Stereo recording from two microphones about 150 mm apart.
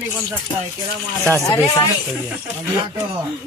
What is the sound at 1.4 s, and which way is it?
Speech, 20° left (ahead or behind).